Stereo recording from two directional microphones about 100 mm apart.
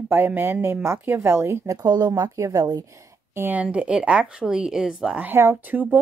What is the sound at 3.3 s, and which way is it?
Speech, 20° right (ahead or behind).